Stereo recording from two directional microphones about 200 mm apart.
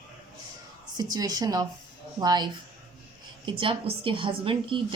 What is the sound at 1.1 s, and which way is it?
A woman's voice, 20° right (ahead or behind).